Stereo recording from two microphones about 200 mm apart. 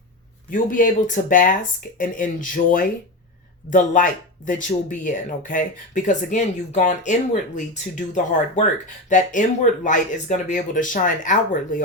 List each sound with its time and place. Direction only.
0.5 s speech: 40° left (ahead or behind)